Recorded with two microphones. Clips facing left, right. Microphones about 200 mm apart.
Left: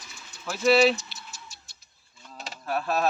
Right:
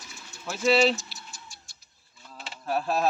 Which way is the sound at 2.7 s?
30° right (ahead or behind).